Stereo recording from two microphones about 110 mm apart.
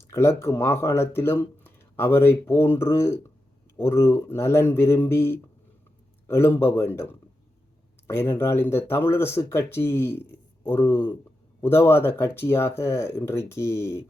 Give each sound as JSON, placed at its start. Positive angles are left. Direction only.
{"t": 0.0, "sound": "speech", "side_deg": 25}